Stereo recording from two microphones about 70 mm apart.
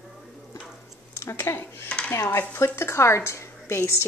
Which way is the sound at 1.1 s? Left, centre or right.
Left.